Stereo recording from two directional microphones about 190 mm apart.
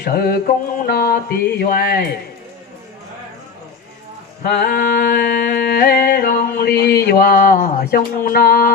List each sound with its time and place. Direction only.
0.0 s mantra: 50° left (ahead or behind)
4.6 s mantra: 45° left (ahead or behind)
5.6 s a sound: 55° left (ahead or behind)